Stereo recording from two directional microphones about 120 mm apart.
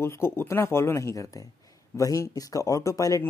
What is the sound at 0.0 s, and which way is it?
Speech, 20° left (ahead or behind).